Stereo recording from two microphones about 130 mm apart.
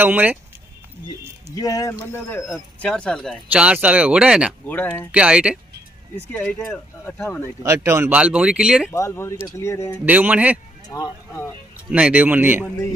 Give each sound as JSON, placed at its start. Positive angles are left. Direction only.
{"t": 0.0, "sound": "speech", "side_deg": -15}
{"t": 1.5, "sound": "speech", "side_deg": 25}
{"t": 2.4, "sound": "speech", "side_deg": 5}
{"t": 3.5, "sound": "speech", "side_deg": -10}
{"t": 4.6, "sound": "speech", "side_deg": 10}
{"t": 5.1, "sound": "speech", "side_deg": -10}
{"t": 7.2, "sound": "speech", "side_deg": 15}
{"t": 7.6, "sound": "speech", "side_deg": -25}
{"t": 8.9, "sound": "speech", "side_deg": 20}
{"t": 10.0, "sound": "speech", "side_deg": -15}
{"t": 10.9, "sound": "speech", "side_deg": 25}
{"t": 11.9, "sound": "speech", "side_deg": -10}